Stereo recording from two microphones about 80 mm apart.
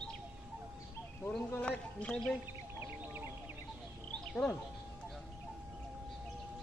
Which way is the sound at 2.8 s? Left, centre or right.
Right.